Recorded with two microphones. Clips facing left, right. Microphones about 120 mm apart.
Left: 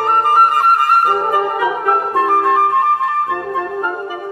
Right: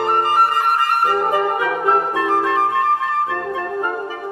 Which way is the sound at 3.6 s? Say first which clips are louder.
Left 2 dB; 15° left (ahead or behind).